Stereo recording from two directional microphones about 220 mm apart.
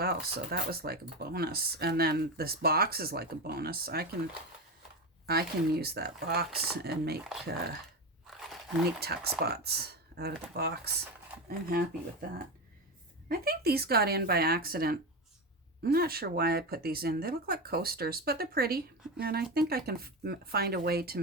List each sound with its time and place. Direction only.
0.0 s speech: 45° right (ahead or behind)
5.2 s speech: 45° right (ahead or behind)
8.4 s biting: 5° right (ahead or behind)
9.0 s speech: 45° right (ahead or behind)
13.2 s speech: 45° right (ahead or behind)